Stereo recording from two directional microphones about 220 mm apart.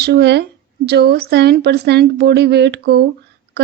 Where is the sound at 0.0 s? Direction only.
50° right (ahead or behind).